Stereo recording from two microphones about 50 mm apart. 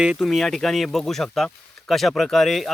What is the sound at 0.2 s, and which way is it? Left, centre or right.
Speech, centre.